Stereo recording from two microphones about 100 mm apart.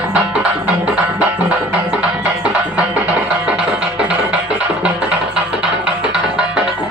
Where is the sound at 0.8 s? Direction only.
10° right (ahead or behind).